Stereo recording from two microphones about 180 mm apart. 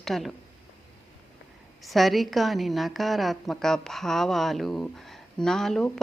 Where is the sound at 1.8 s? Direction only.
Centre (ahead or behind).